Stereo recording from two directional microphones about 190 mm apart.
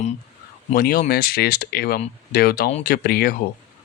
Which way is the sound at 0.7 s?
50° left (ahead or behind).